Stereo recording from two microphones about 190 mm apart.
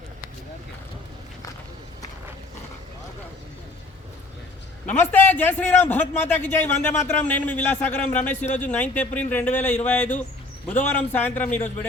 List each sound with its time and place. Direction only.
4.9 s a man's voice: 10° left (ahead or behind)